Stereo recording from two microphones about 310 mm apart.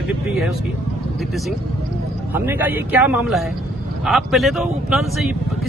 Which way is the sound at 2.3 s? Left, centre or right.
Centre.